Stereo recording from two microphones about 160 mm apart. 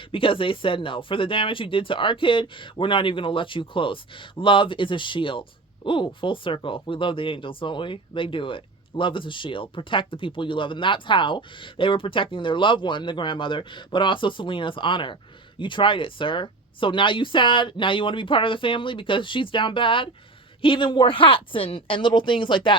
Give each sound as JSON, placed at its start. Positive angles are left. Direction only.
{"t": 0.1, "sound": "speech", "side_deg": 35}